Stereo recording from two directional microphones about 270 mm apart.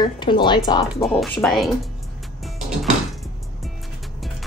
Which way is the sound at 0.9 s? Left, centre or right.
Centre.